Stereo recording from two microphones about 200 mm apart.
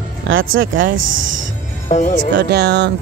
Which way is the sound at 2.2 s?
60° right (ahead or behind).